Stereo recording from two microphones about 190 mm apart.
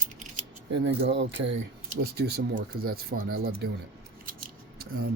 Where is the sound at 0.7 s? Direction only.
65° right (ahead or behind).